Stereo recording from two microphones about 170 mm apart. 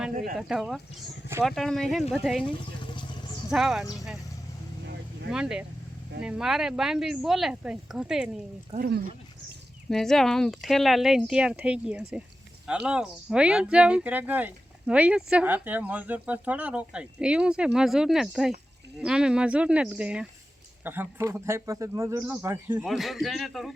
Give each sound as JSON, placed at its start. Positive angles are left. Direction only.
{"t": 0.3, "sound": "speech", "side_deg": -5}
{"t": 3.5, "sound": "speech", "side_deg": 0}
{"t": 5.3, "sound": "speech", "side_deg": -5}
{"t": 8.8, "sound": "speech", "side_deg": -65}
{"t": 9.9, "sound": "speech", "side_deg": 0}
{"t": 22.8, "sound": "speech", "side_deg": 0}